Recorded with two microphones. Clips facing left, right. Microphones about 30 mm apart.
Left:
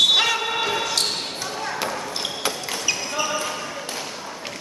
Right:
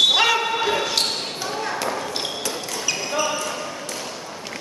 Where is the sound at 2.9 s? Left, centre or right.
Centre.